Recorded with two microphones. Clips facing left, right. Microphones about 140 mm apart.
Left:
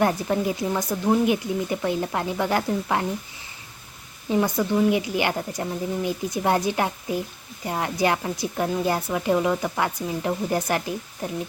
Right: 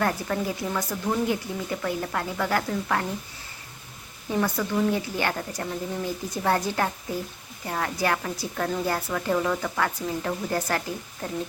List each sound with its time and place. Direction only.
0.0 s speech: 20° left (ahead or behind)
4.3 s a woman's voice: 15° left (ahead or behind)